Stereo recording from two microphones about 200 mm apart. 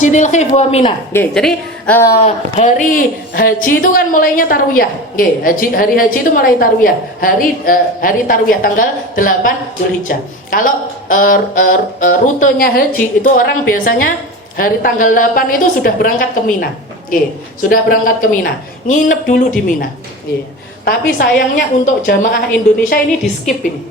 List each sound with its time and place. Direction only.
0.0 s speech: 35° left (ahead or behind)
1.1 s a woman's voice: 5° left (ahead or behind)
2.2 s a woman's voice: 40° left (ahead or behind)
21.2 s a woman's voice: 40° left (ahead or behind)